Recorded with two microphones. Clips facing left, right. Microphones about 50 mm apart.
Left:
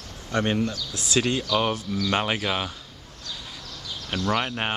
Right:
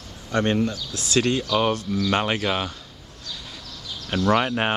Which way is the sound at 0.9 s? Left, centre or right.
Centre.